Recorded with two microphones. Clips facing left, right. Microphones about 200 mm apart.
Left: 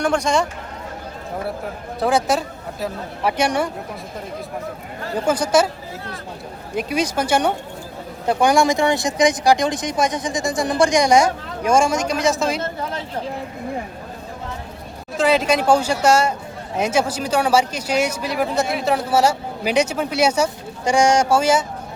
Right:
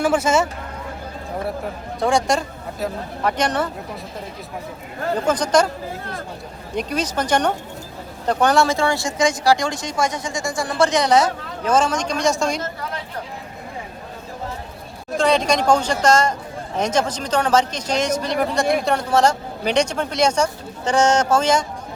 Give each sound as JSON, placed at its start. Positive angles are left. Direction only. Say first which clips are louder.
{"t": 0.0, "sound": "speech", "louder": "right 1 dB", "side_deg": -5}
{"t": 2.0, "sound": "speech", "louder": "even", "side_deg": 5}
{"t": 5.2, "sound": "speech", "louder": "left 1 dB", "side_deg": 10}
{"t": 6.7, "sound": "speech", "louder": "left 2 dB", "side_deg": 10}
{"t": 15.2, "sound": "speech", "louder": "left 1 dB", "side_deg": 5}